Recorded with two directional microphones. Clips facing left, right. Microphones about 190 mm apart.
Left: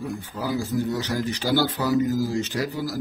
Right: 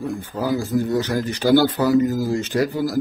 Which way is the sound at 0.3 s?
60° right (ahead or behind).